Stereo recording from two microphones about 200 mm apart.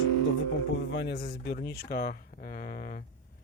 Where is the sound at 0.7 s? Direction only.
60° left (ahead or behind); by 3.0 s 45° left (ahead or behind).